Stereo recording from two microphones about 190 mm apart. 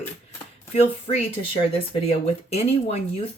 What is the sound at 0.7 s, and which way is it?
Speech, 35° left (ahead or behind).